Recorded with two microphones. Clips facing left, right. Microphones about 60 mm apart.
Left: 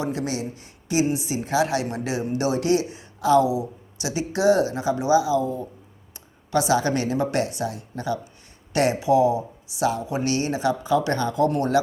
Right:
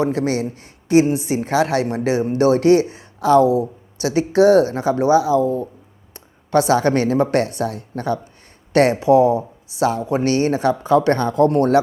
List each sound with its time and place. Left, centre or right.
0.0 s speech: right